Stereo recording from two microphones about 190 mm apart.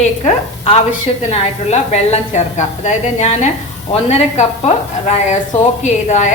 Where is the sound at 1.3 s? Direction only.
35° left (ahead or behind).